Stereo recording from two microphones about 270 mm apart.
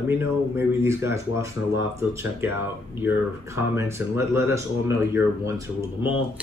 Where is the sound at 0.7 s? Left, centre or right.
Centre.